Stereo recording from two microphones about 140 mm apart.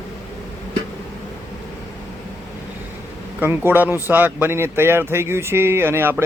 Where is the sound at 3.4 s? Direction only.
15° right (ahead or behind).